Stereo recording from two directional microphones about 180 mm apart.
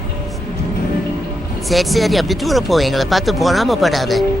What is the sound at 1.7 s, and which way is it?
Speech, centre (ahead or behind).